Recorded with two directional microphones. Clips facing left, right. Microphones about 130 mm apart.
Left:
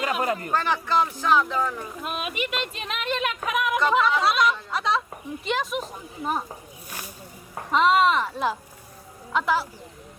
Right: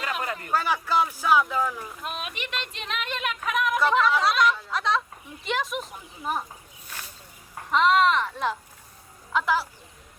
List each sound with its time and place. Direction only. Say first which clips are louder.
0.2 s speech: left 6 dB; 40° left (ahead or behind)
0.5 s speech: right 2 dB; 5° right (ahead or behind)
6.8 s snake: left 2 dB; 10° left (ahead or behind)
7.7 s speech: left 1 dB; 5° left (ahead or behind)